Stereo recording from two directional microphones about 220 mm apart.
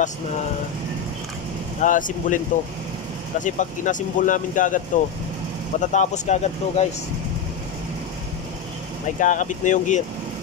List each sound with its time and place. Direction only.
1.8 s speech: 35° left (ahead or behind)
9.2 s speech: 35° left (ahead or behind)